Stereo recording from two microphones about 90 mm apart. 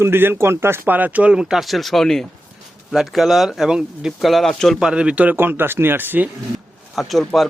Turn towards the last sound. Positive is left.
turn(degrees=5)  # may be behind; listen again after turning